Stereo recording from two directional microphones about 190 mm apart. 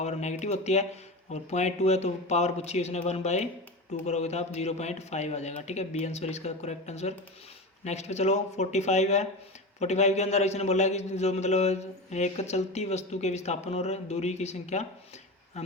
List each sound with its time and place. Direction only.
0.0 s a man's voice: 35° left (ahead or behind)